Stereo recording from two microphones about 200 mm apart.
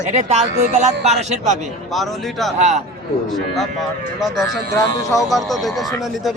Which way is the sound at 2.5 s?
35° right (ahead or behind).